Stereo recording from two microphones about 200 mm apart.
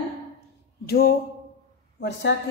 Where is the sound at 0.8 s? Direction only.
50° left (ahead or behind).